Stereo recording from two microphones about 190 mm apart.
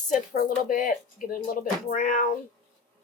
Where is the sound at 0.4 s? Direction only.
45° left (ahead or behind).